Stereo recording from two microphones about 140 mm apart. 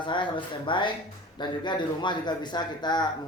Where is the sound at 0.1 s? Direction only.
35° left (ahead or behind).